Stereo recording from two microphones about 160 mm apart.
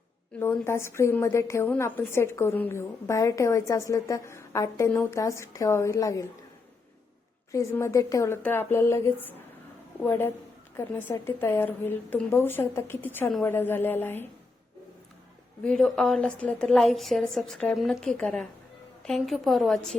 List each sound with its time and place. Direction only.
0.3 s a woman's voice: 15° left (ahead or behind)
7.5 s a woman's voice: 15° left (ahead or behind)
15.6 s a woman's voice: 5° left (ahead or behind)